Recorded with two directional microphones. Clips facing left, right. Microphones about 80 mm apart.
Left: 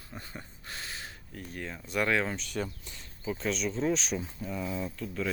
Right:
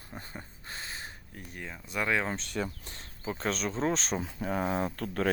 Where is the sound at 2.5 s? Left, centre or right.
Right.